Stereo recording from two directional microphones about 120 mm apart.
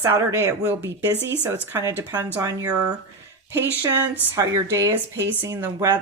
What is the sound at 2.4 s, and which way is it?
Speech, 30° right (ahead or behind).